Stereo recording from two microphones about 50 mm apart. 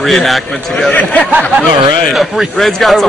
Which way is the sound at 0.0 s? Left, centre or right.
Centre.